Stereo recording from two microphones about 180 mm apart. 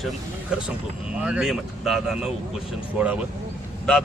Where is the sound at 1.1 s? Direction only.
5° right (ahead or behind).